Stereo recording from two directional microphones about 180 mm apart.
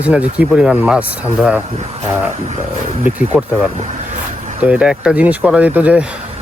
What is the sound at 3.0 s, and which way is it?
Speech, 10° right (ahead or behind).